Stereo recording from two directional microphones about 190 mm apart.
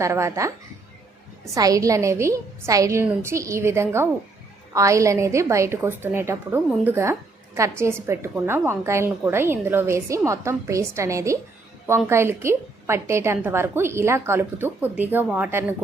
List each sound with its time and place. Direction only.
0.0 s a woman's voice: 15° right (ahead or behind)
1.5 s a woman's voice: 20° right (ahead or behind)